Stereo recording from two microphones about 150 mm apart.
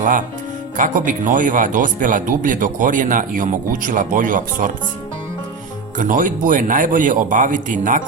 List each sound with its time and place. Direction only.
0.0 s speech: 60° right (ahead or behind)
6.0 s speech: 60° right (ahead or behind)